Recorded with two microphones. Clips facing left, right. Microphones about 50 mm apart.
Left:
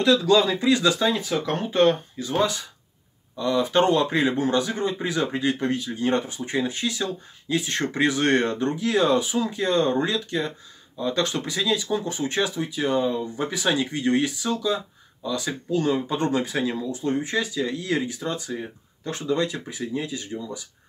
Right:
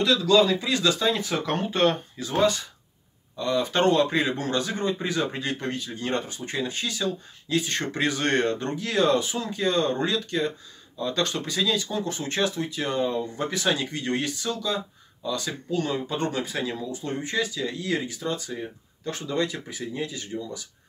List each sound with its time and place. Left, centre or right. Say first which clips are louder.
0.2 s speech: left 1 dB; left
1.1 s speech: left 1 dB; centre; by 18.4 s left
19.4 s speech: left 2 dB; centre